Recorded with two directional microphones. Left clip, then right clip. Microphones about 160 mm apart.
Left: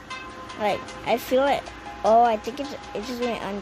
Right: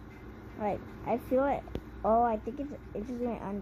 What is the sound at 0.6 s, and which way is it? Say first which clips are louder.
Speech: left 9 dB; 10° left (ahead or behind).